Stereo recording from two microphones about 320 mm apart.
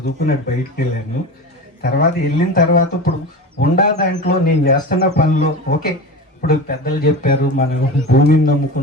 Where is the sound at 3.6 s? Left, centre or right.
Left.